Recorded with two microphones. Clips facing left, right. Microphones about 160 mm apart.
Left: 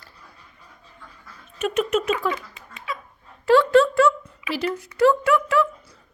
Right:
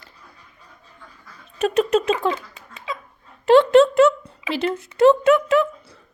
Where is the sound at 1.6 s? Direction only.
35° right (ahead or behind).